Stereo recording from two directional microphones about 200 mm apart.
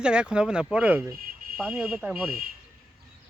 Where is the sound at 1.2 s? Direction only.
45° right (ahead or behind).